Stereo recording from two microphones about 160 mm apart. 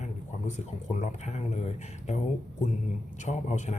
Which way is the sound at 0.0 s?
45° left (ahead or behind).